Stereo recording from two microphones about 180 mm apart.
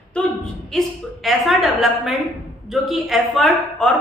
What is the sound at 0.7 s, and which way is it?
A woman's voice, 5° left (ahead or behind).